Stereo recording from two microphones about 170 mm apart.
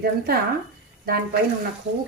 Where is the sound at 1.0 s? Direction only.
65° right (ahead or behind).